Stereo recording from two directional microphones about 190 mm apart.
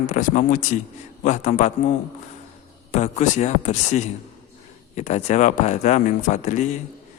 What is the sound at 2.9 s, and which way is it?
A man's voice, 35° left (ahead or behind).